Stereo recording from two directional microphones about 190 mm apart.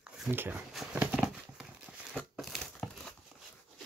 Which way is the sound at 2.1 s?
Centre (ahead or behind).